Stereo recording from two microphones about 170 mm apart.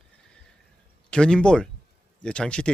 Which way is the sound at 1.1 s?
5° left (ahead or behind).